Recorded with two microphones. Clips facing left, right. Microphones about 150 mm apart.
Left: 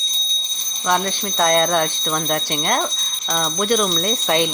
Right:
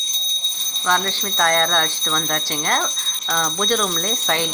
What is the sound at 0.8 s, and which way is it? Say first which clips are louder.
Speech: left 1 dB; 15° left (ahead or behind).